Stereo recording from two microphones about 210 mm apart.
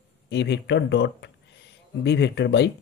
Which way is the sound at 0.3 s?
55° left (ahead or behind).